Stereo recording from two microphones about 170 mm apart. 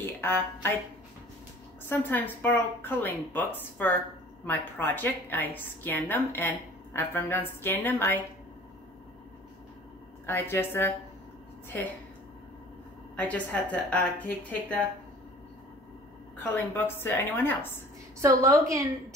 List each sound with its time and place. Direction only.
0.0 s speech: 15° left (ahead or behind)
1.9 s a woman's voice: 10° left (ahead or behind)
10.2 s a woman's voice: 15° left (ahead or behind)
13.1 s a woman's voice: 10° left (ahead or behind)
16.3 s a woman's voice: 10° left (ahead or behind)
18.2 s a woman's voice: 20° right (ahead or behind)